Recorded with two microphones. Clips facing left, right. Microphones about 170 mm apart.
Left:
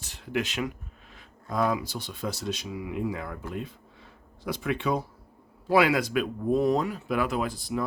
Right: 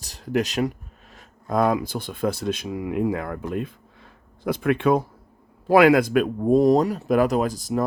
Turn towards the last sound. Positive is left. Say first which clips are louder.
# right 6 dB
turn(degrees=-45)  # may be behind; listen again after turning